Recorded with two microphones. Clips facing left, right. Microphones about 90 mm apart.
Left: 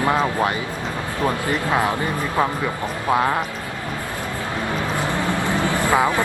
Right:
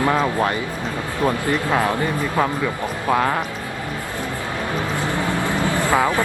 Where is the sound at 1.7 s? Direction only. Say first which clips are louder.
Even; 20° left (ahead or behind).